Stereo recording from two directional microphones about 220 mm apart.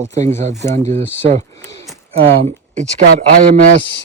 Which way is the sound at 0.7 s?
30° right (ahead or behind).